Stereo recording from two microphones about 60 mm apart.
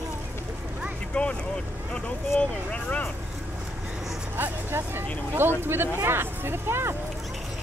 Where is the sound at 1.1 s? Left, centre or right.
Centre.